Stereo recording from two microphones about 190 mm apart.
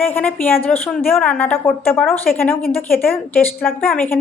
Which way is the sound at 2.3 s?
50° left (ahead or behind).